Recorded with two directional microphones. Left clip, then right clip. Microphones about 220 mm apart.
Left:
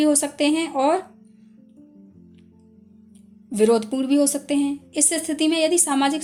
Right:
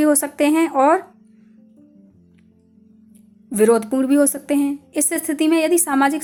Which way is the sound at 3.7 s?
10° right (ahead or behind).